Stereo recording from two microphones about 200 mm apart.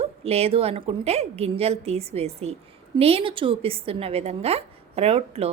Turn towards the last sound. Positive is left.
turn(degrees=-30)  # may be behind; listen again after turning